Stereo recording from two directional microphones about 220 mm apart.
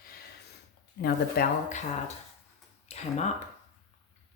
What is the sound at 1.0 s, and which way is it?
Speech, 40° left (ahead or behind).